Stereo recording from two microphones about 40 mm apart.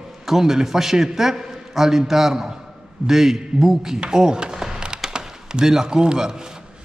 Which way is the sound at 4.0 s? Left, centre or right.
Centre.